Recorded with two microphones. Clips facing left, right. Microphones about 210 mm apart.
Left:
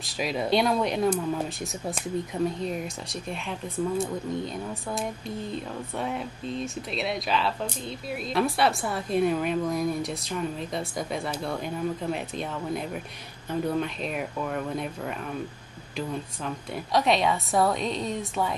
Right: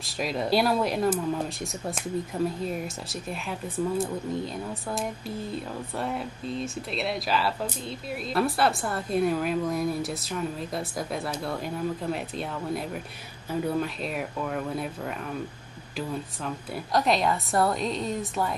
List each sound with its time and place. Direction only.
0.0 s a woman's voice: centre (ahead or behind)
5.9 s a woman's voice: centre (ahead or behind)
16.4 s a woman's voice: centre (ahead or behind)